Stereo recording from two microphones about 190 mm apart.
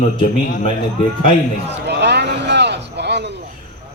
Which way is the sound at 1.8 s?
60° right (ahead or behind).